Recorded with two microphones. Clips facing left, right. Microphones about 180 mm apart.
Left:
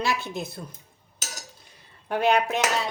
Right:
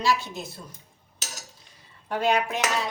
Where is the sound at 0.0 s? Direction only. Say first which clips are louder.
Right 2 dB; 55° left (ahead or behind).